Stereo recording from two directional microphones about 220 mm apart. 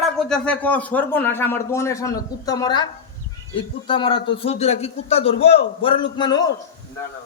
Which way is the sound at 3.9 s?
20° left (ahead or behind).